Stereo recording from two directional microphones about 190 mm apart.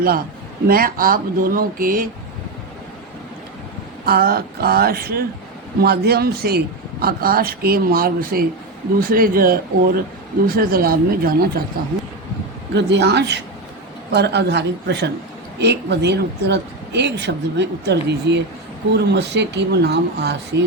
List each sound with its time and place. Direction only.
0.7 s speech: 50° right (ahead or behind)
4.0 s speech: 55° right (ahead or behind)
12.7 s speech: 65° right (ahead or behind)